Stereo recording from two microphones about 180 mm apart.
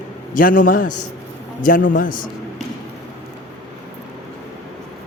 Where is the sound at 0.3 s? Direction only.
50° left (ahead or behind).